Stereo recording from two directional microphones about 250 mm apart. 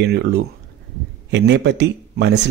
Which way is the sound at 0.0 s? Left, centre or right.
Right.